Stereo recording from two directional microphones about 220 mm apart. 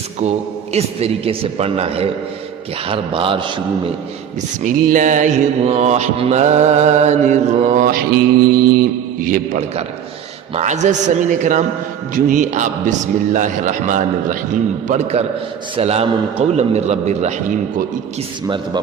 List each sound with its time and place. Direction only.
0.2 s a man's voice: 30° right (ahead or behind)
4.6 s mantra: 35° right (ahead or behind)
15.7 s a man's voice: 30° right (ahead or behind)
18.4 s a man's voice: 20° right (ahead or behind)